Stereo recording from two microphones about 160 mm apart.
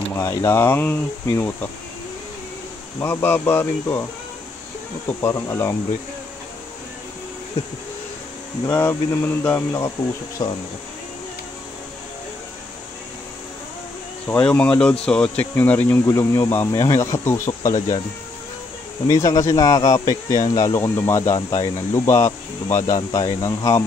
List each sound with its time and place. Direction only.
0.2 s speech: 20° left (ahead or behind)
3.0 s speech: 15° left (ahead or behind)
8.6 s speech: 15° left (ahead or behind)
14.2 s speech: 10° left (ahead or behind)
19.0 s speech: 20° left (ahead or behind)